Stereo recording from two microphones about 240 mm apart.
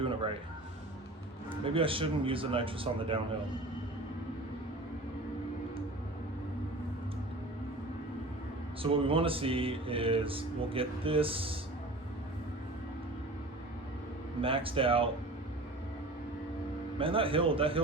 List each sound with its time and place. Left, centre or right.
0.0 s a sound: right
1.6 s speech: right
8.8 s speech: right
14.4 s speech: right
17.0 s speech: right